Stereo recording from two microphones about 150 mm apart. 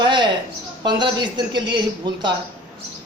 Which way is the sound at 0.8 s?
30° right (ahead or behind).